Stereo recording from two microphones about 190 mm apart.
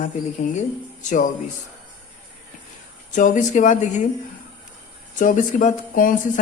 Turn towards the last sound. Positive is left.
turn(degrees=45)  # may be behind; listen again after turning